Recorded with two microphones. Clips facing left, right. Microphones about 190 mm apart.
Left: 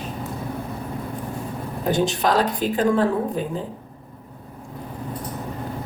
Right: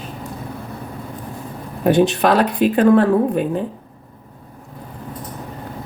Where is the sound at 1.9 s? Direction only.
65° right (ahead or behind).